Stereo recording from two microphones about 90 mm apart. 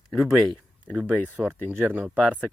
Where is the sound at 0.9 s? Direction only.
15° right (ahead or behind).